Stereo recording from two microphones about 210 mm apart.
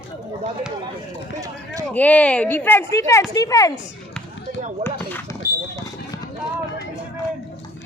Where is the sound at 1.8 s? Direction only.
5° left (ahead or behind).